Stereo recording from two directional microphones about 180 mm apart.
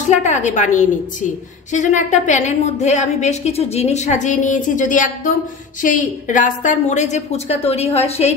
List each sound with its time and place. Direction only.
0.0 s a woman's voice: 40° left (ahead or behind)